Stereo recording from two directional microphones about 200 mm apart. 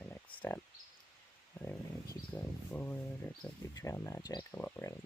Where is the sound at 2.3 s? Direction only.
10° left (ahead or behind).